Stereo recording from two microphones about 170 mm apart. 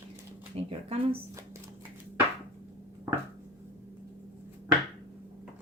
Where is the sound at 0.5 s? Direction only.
40° right (ahead or behind).